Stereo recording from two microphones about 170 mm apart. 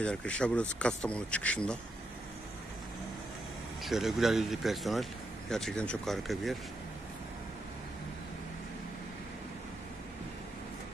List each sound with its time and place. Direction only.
0.0 s speech: 5° left (ahead or behind)
3.8 s speech: centre (ahead or behind)